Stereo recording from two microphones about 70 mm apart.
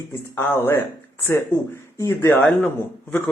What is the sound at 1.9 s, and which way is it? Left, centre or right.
Speech, left.